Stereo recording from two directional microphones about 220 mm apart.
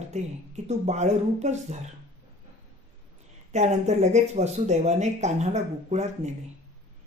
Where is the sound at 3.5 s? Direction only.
30° right (ahead or behind).